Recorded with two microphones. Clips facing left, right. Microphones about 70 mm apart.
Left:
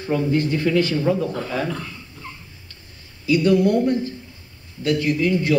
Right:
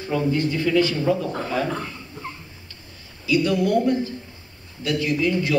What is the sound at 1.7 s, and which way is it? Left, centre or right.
Dog, right.